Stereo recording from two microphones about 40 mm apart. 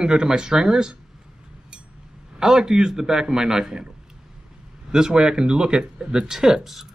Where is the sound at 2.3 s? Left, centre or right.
Centre.